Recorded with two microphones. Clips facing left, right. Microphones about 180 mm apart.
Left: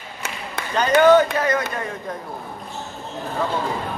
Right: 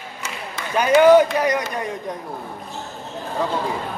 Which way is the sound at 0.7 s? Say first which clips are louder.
Right 2 dB; 10° right (ahead or behind).